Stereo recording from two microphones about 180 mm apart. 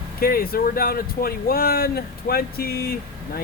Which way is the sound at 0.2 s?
55° left (ahead or behind).